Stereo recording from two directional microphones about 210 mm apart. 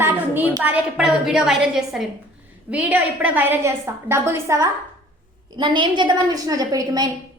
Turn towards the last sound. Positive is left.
turn(degrees=-20)  # may be behind; listen again after turning